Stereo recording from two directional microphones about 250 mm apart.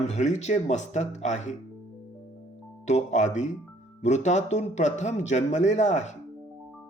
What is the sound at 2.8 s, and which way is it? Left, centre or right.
Speech, left.